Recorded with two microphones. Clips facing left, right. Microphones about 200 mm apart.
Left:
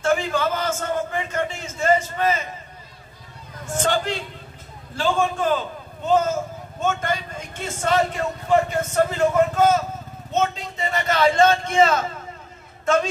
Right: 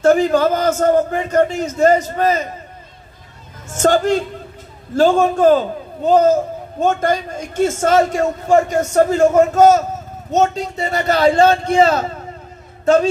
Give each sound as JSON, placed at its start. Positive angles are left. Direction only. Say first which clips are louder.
{"t": 0.0, "sound": "a man's voice", "louder": "right 9 dB", "side_deg": -40}
{"t": 3.6, "sound": "a man's voice", "louder": "right 8 dB", "side_deg": -45}